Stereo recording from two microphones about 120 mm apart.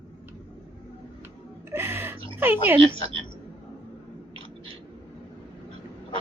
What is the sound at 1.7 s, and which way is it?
Gasp, 15° right (ahead or behind).